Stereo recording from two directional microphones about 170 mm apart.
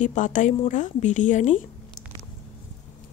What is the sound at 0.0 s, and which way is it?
Speech, 50° left (ahead or behind).